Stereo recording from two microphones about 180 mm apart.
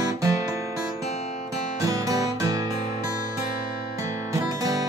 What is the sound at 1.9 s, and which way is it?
Music, 20° right (ahead or behind).